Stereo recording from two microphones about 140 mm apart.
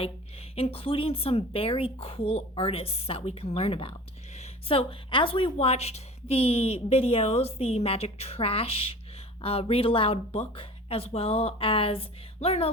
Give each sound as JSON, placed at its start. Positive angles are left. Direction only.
{"t": 0.5, "sound": "a woman's voice", "side_deg": 45}